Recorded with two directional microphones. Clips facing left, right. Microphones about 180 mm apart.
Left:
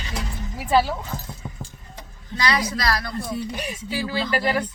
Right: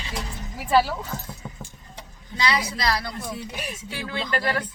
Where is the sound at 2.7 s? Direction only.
20° right (ahead or behind).